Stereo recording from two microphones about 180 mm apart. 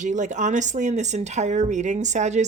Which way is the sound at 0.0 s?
45° right (ahead or behind).